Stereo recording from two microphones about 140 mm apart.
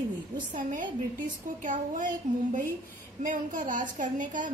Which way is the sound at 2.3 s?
55° right (ahead or behind).